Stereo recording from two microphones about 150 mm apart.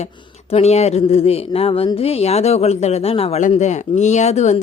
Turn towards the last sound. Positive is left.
turn(degrees=45)  # may be behind; listen again after turning